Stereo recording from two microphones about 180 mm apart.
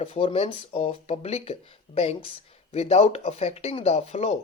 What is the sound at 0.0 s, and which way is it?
Speech, 30° left (ahead or behind).